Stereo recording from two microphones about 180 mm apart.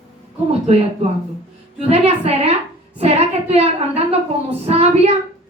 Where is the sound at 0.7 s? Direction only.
35° right (ahead or behind).